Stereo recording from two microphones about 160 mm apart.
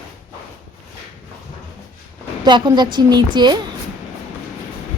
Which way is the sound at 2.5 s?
30° right (ahead or behind).